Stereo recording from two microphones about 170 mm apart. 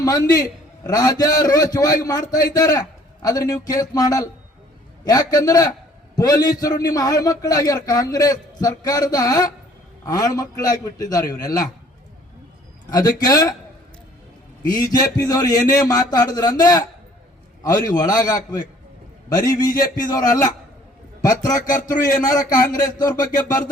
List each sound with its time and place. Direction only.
0.0 s a man's voice: 20° left (ahead or behind)
12.9 s a man's voice: 20° left (ahead or behind)
14.9 s a man's voice: 20° left (ahead or behind)